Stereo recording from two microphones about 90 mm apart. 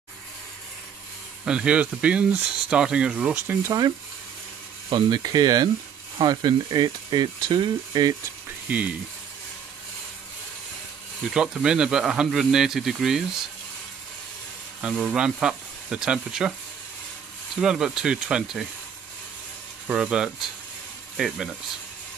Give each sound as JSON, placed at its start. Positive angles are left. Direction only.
{"t": 1.4, "sound": "speech", "side_deg": -10}
{"t": 3.6, "sound": "speech", "side_deg": -45}
{"t": 6.1, "sound": "speech", "side_deg": -60}
{"t": 7.9, "sound": "speech", "side_deg": -45}
{"t": 8.6, "sound": "speech", "side_deg": -15}
{"t": 11.2, "sound": "speech", "side_deg": -10}
{"t": 14.8, "sound": "speech", "side_deg": -10}
{"t": 17.6, "sound": "speech", "side_deg": -10}
{"t": 19.9, "sound": "speech", "side_deg": -10}